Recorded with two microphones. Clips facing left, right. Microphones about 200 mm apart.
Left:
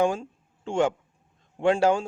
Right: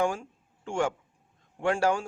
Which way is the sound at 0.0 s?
25° left (ahead or behind).